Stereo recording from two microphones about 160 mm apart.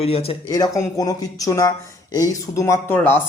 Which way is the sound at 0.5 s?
25° left (ahead or behind).